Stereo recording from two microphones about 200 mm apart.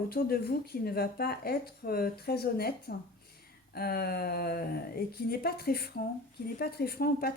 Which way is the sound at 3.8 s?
50° left (ahead or behind).